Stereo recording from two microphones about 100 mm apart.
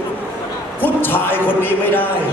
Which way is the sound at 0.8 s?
20° left (ahead or behind).